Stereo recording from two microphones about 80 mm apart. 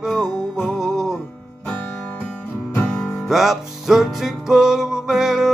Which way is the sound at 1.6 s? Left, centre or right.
Centre.